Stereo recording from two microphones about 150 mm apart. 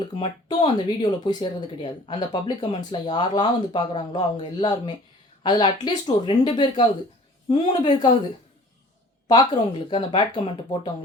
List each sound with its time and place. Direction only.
0.2 s a woman's voice: 35° left (ahead or behind)
9.2 s speech: 30° left (ahead or behind)